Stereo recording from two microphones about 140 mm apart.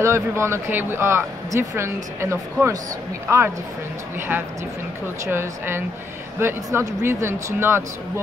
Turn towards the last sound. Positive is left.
turn(degrees=-15)  # may be behind; listen again after turning